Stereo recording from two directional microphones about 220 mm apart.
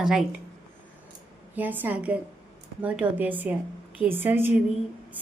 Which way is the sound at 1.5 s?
10° right (ahead or behind).